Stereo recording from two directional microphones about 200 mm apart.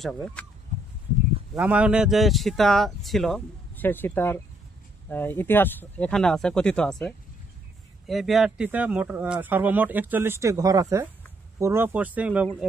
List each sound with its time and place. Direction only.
0.0 s speech: 5° left (ahead or behind)
1.5 s speech: 5° right (ahead or behind)